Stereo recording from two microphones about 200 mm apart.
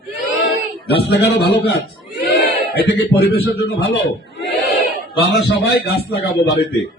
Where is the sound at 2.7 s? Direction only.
55° left (ahead or behind).